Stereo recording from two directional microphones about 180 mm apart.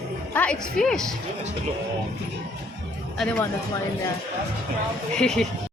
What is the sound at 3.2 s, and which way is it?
Speech, 5° left (ahead or behind).